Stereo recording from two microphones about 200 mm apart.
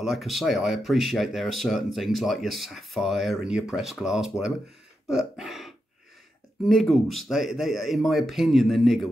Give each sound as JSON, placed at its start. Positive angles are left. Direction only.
{"t": 0.0, "sound": "speech", "side_deg": 0}